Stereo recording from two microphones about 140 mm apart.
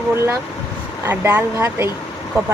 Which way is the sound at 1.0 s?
15° right (ahead or behind).